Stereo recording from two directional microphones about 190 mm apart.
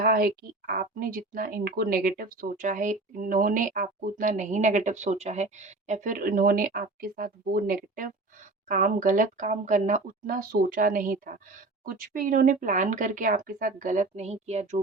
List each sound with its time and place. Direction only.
0.0 s a woman's voice: 50° right (ahead or behind); by 14.8 s 35° right (ahead or behind)